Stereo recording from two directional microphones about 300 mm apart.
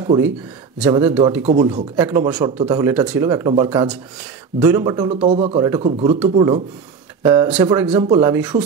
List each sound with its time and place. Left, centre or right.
0.8 s speech: centre
1.4 s speech: right
2.0 s speech: centre